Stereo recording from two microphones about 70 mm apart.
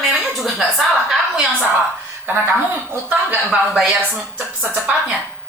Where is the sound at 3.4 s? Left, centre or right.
Centre.